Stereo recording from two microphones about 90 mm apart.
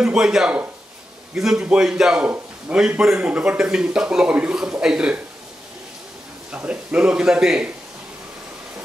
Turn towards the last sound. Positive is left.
turn(degrees=-10)  # may be behind; listen again after turning